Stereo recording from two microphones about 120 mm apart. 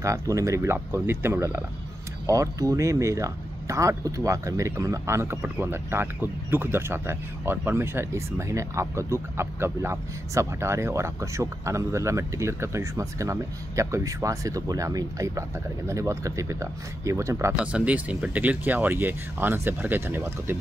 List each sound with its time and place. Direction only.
0.0 s speech: 25° right (ahead or behind)
17.6 s speech: 10° right (ahead or behind)